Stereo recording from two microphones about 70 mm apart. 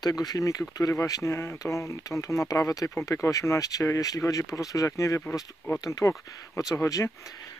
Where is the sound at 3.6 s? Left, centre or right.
Left.